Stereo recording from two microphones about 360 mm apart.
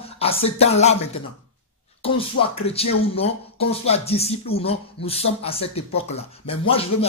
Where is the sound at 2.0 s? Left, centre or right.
Centre.